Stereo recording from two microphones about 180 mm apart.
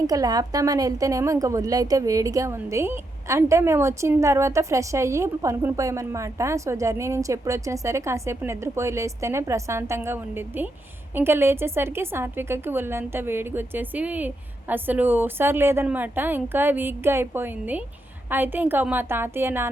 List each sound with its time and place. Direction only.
0.1 s a woman's voice: 20° right (ahead or behind)